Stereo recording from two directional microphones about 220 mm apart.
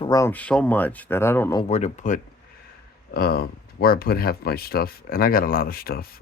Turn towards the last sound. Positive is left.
turn(degrees=45)  # may be behind; listen again after turning